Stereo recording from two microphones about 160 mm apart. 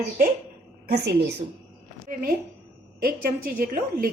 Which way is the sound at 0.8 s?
90° right.